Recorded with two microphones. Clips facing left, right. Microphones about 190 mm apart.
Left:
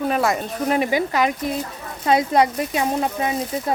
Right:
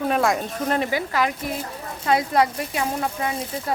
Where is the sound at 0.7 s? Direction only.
20° left (ahead or behind).